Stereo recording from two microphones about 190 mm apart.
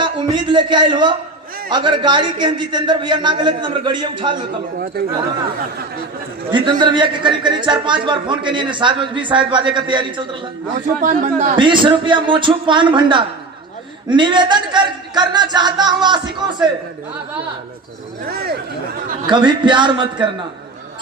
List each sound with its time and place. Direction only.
0.0 s a man's voice: 25° right (ahead or behind)
6.5 s a man's voice: 25° right (ahead or behind)
11.0 s speech: 40° right (ahead or behind)
11.5 s a man's voice: 25° right (ahead or behind)
18.3 s speech: 55° right (ahead or behind)
19.5 s a man's voice: 25° right (ahead or behind)